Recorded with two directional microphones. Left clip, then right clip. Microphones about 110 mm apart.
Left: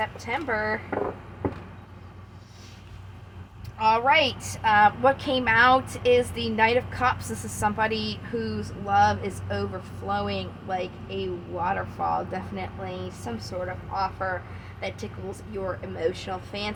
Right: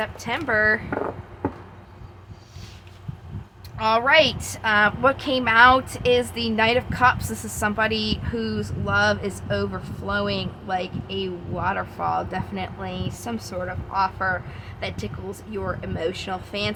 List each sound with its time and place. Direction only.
0.0 s speech: 60° right (ahead or behind)
3.8 s a woman's voice: 50° right (ahead or behind)
13.9 s speech: 45° right (ahead or behind)